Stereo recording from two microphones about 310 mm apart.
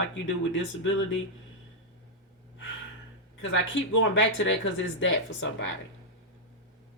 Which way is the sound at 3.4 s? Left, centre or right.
Left.